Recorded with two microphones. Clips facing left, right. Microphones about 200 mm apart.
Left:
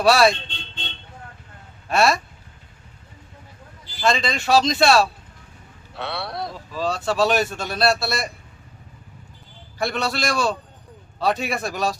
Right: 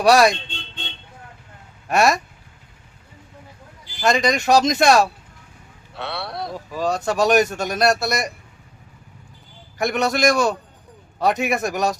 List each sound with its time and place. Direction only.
0.0 s speech: 15° right (ahead or behind)
1.9 s speech: 15° right (ahead or behind)
4.0 s speech: 15° right (ahead or behind)
5.9 s speech: centre (ahead or behind)
6.7 s speech: 15° right (ahead or behind)
9.7 s a man's voice: 20° right (ahead or behind)